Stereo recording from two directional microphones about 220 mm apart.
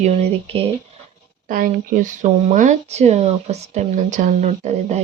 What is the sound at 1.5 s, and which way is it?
Speech, 40° right (ahead or behind).